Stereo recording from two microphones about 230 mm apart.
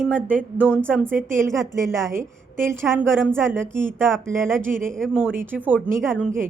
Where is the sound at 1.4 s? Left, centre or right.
Centre.